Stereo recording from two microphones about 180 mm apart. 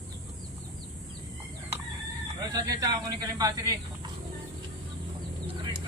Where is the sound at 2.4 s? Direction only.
20° right (ahead or behind).